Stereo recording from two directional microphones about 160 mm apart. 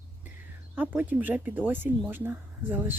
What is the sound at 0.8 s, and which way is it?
Speech, 10° right (ahead or behind).